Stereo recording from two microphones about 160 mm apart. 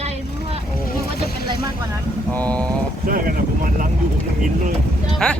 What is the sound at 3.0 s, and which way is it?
Speech, 60° right (ahead or behind).